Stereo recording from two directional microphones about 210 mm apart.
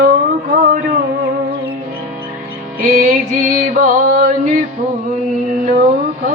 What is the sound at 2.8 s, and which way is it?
Music, 40° right (ahead or behind).